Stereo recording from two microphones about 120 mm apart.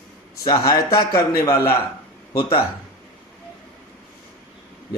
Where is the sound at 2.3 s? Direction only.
50° left (ahead or behind).